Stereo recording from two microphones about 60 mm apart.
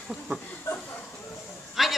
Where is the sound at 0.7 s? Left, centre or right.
Left.